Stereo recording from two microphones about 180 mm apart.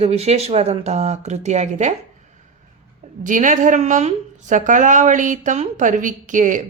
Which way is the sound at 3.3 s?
45° right (ahead or behind).